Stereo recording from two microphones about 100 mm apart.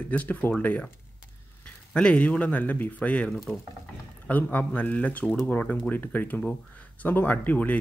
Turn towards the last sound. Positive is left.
turn(degrees=15)  # may be behind; listen again after turning